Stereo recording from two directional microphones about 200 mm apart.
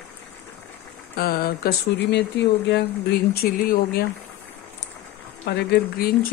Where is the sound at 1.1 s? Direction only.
50° left (ahead or behind).